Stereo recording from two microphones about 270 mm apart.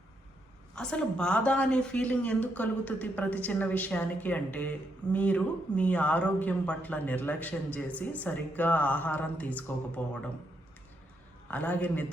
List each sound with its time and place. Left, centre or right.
0.8 s speech: centre
11.5 s speech: centre